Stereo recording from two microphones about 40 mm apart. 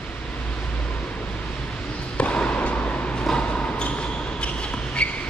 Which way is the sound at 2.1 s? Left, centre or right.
Left.